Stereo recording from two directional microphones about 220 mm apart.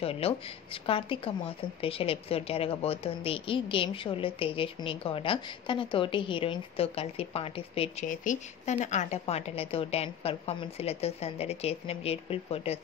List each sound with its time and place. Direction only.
0.0 s a woman's voice: 25° left (ahead or behind)
8.1 s a woman's voice: 35° left (ahead or behind)